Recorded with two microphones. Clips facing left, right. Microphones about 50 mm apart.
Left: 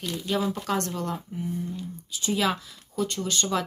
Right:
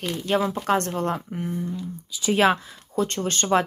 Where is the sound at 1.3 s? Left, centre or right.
Right.